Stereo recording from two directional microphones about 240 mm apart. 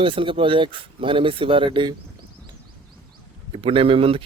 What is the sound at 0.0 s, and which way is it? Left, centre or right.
Speech, right.